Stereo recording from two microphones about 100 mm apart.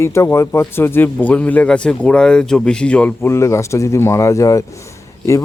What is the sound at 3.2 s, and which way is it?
Speech, 25° left (ahead or behind).